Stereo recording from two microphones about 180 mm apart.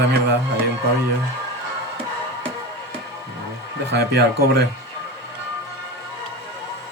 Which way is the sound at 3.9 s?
65° right (ahead or behind).